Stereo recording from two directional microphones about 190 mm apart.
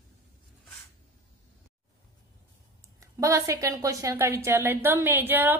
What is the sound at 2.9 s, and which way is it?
A woman's voice, 15° right (ahead or behind).